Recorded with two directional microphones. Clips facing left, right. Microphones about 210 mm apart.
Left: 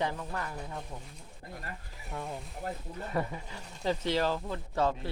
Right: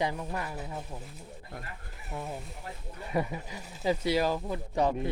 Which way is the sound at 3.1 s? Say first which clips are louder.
Right 3 dB; 10° right (ahead or behind).